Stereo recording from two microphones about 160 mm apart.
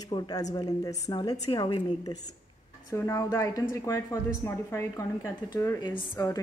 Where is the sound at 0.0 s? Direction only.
25° left (ahead or behind).